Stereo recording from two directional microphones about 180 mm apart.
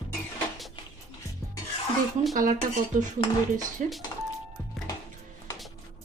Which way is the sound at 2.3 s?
45° right (ahead or behind).